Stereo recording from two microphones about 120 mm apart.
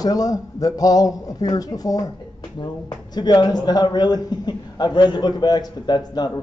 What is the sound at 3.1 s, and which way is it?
A man's voice, 35° left (ahead or behind).